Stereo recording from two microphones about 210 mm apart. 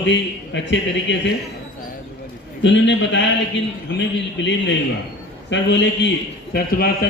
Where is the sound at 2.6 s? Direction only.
60° left (ahead or behind).